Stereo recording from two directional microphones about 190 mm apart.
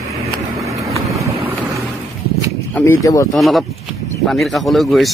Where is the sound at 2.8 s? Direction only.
15° left (ahead or behind).